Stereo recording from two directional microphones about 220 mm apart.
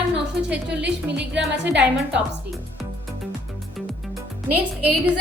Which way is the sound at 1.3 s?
50° right (ahead or behind).